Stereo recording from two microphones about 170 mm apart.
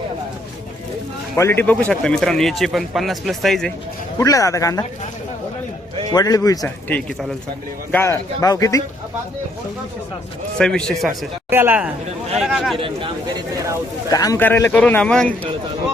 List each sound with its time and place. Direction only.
1.4 s a man's voice: 15° left (ahead or behind)
4.2 s speech: 20° left (ahead or behind)
6.1 s speech: 20° left (ahead or behind)
6.8 s speech: 10° left (ahead or behind)
10.6 s a man's voice: 5° left (ahead or behind)
11.5 s a man's voice: 10° right (ahead or behind)
12.7 s speech: 30° right (ahead or behind)
14.1 s speech: 20° left (ahead or behind)